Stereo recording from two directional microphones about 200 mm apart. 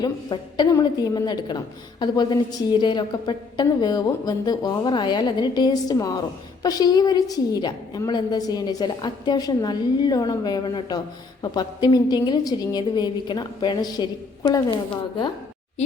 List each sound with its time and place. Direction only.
0.0 s a woman's voice: 20° left (ahead or behind)